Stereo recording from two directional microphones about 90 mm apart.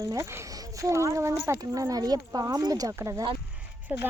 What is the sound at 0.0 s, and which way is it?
Speech, 35° right (ahead or behind).